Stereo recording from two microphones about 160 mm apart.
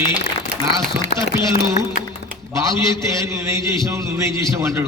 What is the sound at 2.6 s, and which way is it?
A man's voice, 20° right (ahead or behind).